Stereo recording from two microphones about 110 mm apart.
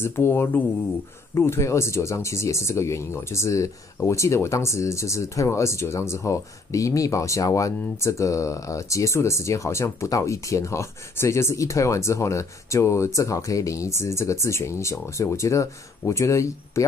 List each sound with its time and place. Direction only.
0.0 s speech: 20° left (ahead or behind)